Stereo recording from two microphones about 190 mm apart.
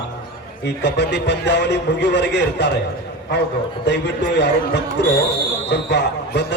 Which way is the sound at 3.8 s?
65° left (ahead or behind).